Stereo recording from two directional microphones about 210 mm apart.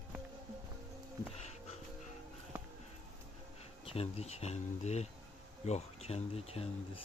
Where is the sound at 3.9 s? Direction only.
30° left (ahead or behind).